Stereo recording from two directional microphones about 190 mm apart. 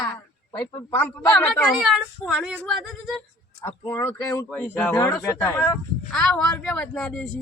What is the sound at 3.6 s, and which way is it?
Speech, 10° left (ahead or behind).